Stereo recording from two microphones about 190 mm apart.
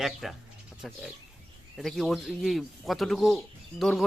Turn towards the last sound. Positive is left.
turn(degrees=0)  # may be behind; listen again after turning